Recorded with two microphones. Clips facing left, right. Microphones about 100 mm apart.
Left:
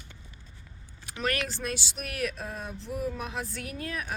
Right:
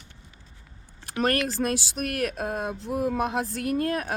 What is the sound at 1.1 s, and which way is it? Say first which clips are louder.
Speech: right 6 dB; 45° right (ahead or behind).